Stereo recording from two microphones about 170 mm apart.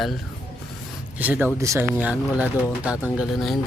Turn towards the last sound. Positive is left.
turn(degrees=0)  # may be behind; listen again after turning